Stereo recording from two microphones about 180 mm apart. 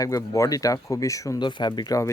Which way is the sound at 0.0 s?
20° left (ahead or behind).